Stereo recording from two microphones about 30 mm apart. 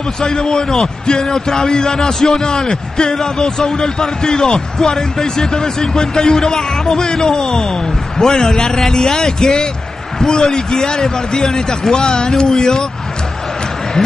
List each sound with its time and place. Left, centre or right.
0.2 s a man's voice: left